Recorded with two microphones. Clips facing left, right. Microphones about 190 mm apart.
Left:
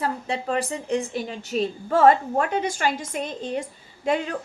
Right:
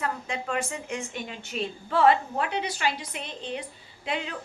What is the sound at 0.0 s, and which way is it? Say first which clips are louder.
A woman's voice: left 4 dB; 35° left (ahead or behind).